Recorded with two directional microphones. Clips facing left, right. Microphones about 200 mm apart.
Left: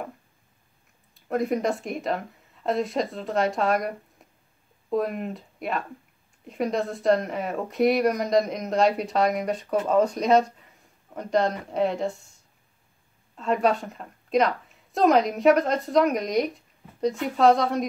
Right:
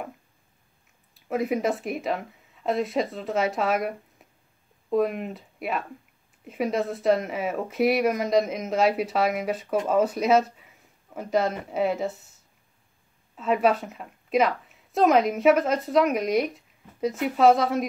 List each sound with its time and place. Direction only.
1.1 s a woman's voice: centre (ahead or behind)
13.4 s a woman's voice: 5° right (ahead or behind)